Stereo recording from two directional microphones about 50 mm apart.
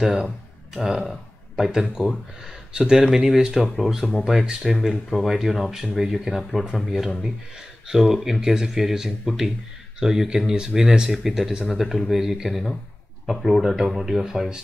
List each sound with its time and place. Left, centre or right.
0.0 s speech: centre
1.7 s speech: centre
3.6 s speech: centre